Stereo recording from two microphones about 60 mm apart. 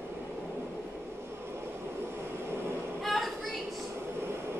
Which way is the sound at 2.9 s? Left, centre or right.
Centre.